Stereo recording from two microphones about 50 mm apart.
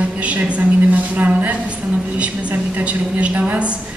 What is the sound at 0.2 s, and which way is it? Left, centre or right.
A woman's voice, right.